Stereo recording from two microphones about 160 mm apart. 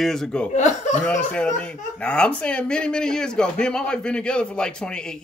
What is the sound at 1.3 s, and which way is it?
Speech, 5° left (ahead or behind).